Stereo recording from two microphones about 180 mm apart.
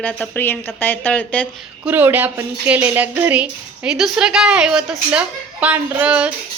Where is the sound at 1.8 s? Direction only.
10° right (ahead or behind).